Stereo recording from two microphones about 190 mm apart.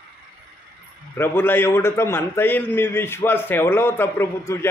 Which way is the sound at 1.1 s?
10° left (ahead or behind).